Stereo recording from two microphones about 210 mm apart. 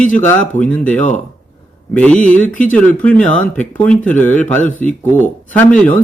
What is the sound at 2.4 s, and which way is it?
Speech, 40° left (ahead or behind).